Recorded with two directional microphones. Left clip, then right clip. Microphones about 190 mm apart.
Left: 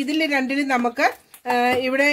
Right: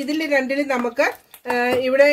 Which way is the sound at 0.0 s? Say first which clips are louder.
Right 1 dB; 45° left (ahead or behind).